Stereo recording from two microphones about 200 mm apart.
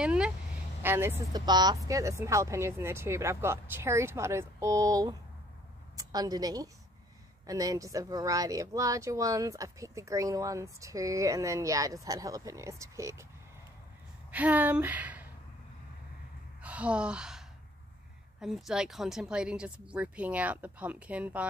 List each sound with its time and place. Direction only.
0.0 s vehicle: 5° right (ahead or behind)
0.8 s speech: 10° right (ahead or behind)
14.3 s speech: 10° right (ahead or behind)
16.6 s gasp: 5° right (ahead or behind)
18.4 s speech: centre (ahead or behind)